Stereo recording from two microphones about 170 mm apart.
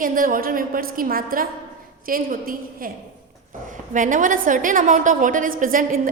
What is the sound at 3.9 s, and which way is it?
A woman's voice, 50° right (ahead or behind).